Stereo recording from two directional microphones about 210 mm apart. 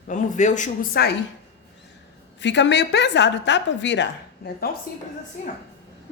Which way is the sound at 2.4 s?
55° left (ahead or behind).